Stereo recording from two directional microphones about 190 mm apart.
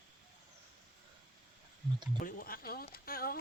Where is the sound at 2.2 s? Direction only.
50° left (ahead or behind).